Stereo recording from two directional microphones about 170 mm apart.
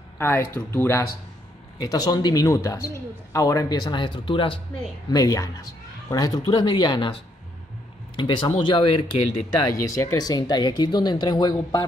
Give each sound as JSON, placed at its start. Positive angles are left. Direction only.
{"t": 0.2, "sound": "speech", "side_deg": 15}
{"t": 8.2, "sound": "speech", "side_deg": 25}
{"t": 9.6, "sound": "speech", "side_deg": 20}